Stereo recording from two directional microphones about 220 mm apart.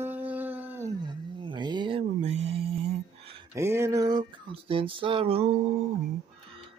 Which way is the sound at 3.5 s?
10° right (ahead or behind).